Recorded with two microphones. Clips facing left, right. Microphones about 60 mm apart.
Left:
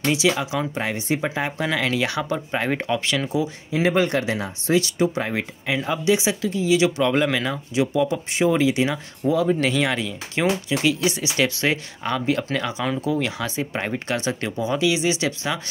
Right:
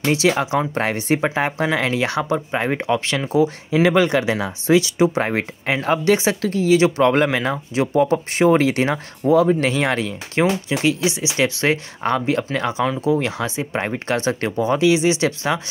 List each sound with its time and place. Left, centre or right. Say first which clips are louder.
0.1 s speech: right 4 dB; right
0.7 s speech: right 5 dB; right
1.7 s speech: right 3 dB; right
2.3 s speech: right 3 dB; centre
3.4 s speech: right 5 dB; right
5.3 s speech: right 3 dB; right
9.5 s speech: right 2 dB; right
10.7 s speech: right 2 dB; right